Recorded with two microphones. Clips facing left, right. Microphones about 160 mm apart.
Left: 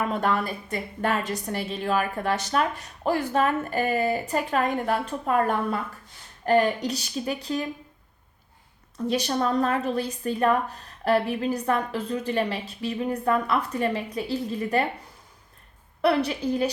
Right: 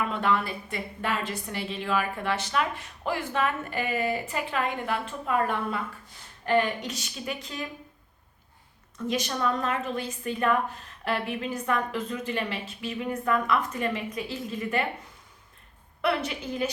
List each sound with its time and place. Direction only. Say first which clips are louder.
0.0 s a woman's voice: left 2 dB; 40° left (ahead or behind)
9.0 s a woman's voice: left 3 dB; 35° left (ahead or behind)
16.0 s a woman's voice: left 5 dB; 35° left (ahead or behind)